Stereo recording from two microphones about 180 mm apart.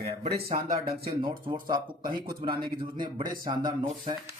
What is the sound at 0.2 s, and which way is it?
Speech, 60° right (ahead or behind).